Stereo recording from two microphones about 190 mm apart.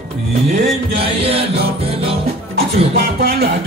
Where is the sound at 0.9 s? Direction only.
30° right (ahead or behind).